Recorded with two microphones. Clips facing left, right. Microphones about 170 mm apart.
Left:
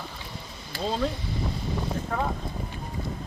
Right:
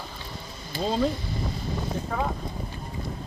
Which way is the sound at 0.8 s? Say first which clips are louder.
Right 3 dB; centre (ahead or behind).